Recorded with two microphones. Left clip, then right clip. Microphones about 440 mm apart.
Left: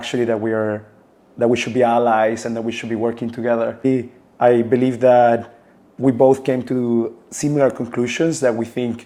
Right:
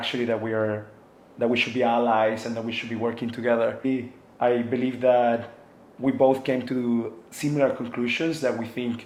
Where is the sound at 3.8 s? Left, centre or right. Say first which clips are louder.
Left 9 dB; left.